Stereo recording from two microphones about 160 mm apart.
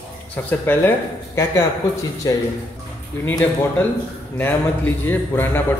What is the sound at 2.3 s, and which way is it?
Speech, 25° left (ahead or behind).